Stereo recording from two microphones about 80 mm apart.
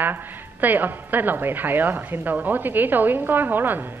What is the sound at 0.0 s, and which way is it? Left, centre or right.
Speech, right.